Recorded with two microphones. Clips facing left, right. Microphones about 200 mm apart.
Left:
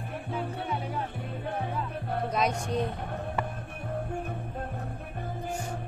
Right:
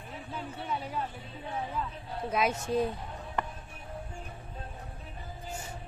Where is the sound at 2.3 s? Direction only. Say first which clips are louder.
Right 2 dB; 5° right (ahead or behind).